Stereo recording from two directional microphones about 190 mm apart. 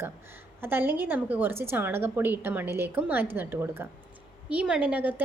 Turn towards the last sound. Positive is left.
turn(degrees=-10)  # may be behind; listen again after turning